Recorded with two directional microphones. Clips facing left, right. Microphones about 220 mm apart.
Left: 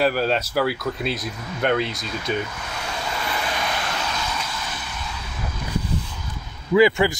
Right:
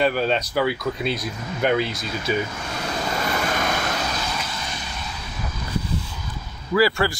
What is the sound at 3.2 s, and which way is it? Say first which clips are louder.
Vehicle: right 3 dB; 45° right (ahead or behind).